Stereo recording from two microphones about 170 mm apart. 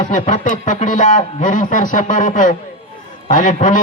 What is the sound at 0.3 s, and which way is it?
Speech, 50° left (ahead or behind).